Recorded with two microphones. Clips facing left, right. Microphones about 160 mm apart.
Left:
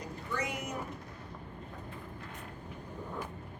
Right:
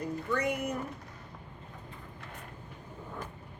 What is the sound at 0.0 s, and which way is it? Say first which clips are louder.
Speech: right 6 dB; 55° right (ahead or behind).